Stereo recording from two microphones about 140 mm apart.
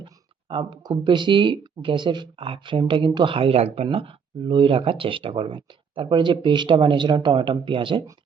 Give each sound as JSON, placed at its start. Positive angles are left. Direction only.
{"t": 0.0, "sound": "speech", "side_deg": -35}